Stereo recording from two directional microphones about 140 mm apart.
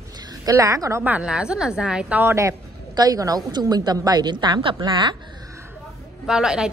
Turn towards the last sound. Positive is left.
turn(degrees=-5)  # may be behind; listen again after turning